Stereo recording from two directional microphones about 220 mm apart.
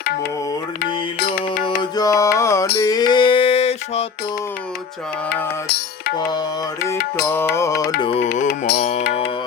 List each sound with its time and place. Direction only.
0.0 s music: 45° left (ahead or behind)
1.8 s music: 15° left (ahead or behind)
2.7 s a sound: 15° left (ahead or behind)
5.6 s music: 45° left (ahead or behind)
7.3 s music: 10° left (ahead or behind)
8.0 s music: 25° left (ahead or behind)
8.3 s mantra: 45° left (ahead or behind)